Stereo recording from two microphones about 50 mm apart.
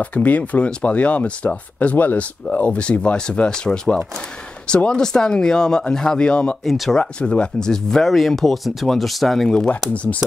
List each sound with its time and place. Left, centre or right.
0.0 s speech: left
6.6 s speech: centre
7.0 s speech: left
7.7 s speech: centre